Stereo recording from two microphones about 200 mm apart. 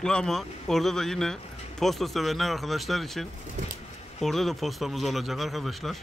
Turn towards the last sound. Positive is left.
turn(degrees=0)  # may be behind; listen again after turning